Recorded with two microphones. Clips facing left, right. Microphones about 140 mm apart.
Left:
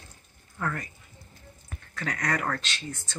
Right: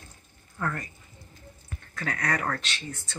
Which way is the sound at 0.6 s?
Centre (ahead or behind).